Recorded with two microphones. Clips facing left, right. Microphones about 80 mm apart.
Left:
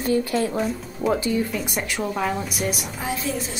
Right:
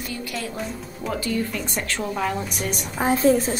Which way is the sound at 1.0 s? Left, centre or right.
Centre.